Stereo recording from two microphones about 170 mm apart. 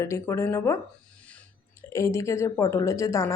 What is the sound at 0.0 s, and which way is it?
Speech, 15° left (ahead or behind).